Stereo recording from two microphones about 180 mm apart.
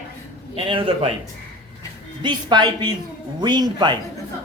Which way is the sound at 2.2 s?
25° right (ahead or behind).